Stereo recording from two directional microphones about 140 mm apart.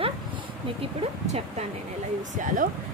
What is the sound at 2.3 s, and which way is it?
Speech, 65° right (ahead or behind).